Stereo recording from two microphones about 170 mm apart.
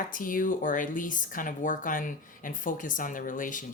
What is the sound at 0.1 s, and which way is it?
Speech, 55° left (ahead or behind).